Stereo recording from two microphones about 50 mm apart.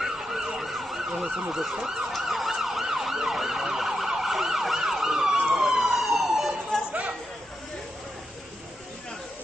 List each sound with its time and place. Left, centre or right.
0.0 s ambulance: centre
1.5 s emergency vehicle: centre
6.9 s chatter: right